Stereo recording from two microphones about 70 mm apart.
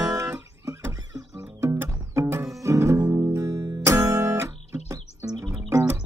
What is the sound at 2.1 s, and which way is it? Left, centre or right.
Music, right.